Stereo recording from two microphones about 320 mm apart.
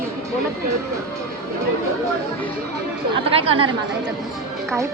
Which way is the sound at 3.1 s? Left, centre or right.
Centre.